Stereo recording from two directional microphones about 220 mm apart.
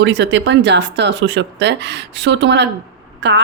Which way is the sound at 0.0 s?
55° right (ahead or behind).